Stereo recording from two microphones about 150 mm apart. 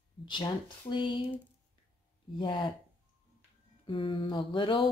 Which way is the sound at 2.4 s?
30° left (ahead or behind).